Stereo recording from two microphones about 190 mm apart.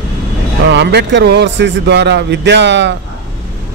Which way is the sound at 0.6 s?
65° right (ahead or behind).